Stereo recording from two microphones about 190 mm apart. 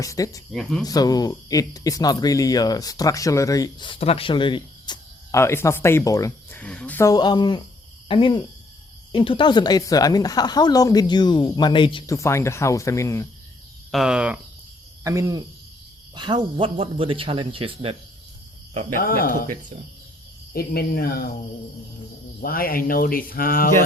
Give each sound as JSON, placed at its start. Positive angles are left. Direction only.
{"t": 0.0, "sound": "speech", "side_deg": 20}
{"t": 0.5, "sound": "speech", "side_deg": 0}
{"t": 0.9, "sound": "speech", "side_deg": 20}
{"t": 8.0, "sound": "cricket", "side_deg": 25}
{"t": 9.1, "sound": "speech", "side_deg": 25}
{"t": 13.9, "sound": "speech", "side_deg": -5}
{"t": 15.0, "sound": "hoot", "side_deg": -15}
{"t": 16.1, "sound": "speech", "side_deg": -25}
{"t": 18.9, "sound": "speech", "side_deg": 50}
{"t": 20.5, "sound": "speech", "side_deg": 55}
{"t": 22.4, "sound": "speech", "side_deg": 50}